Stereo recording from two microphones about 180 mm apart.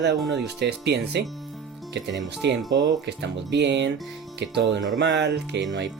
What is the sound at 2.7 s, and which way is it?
Speech, 20° right (ahead or behind).